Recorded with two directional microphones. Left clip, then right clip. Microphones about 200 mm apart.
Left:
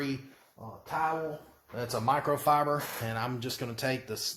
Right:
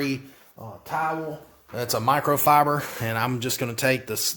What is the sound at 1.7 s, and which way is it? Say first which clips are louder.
Speech: right 6 dB; 50° right (ahead or behind).